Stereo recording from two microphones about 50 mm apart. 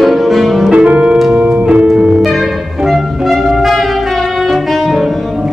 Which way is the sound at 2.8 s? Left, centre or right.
Centre.